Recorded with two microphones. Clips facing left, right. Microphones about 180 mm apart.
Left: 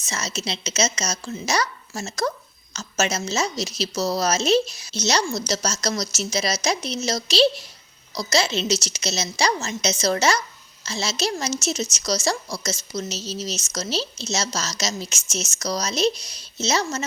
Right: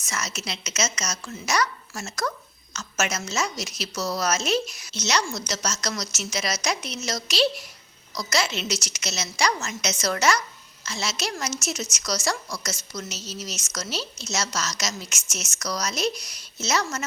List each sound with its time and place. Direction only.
0.0 s a woman's voice: 30° left (ahead or behind)